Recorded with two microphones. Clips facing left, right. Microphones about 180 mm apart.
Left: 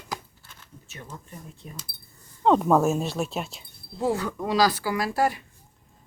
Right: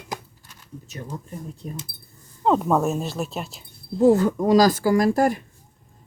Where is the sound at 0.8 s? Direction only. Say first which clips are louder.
Right 7 dB; 35° right (ahead or behind).